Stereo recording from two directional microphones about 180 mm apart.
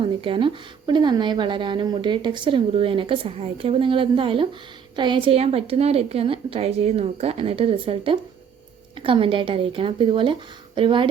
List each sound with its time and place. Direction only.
0.2 s a woman's voice: 30° right (ahead or behind)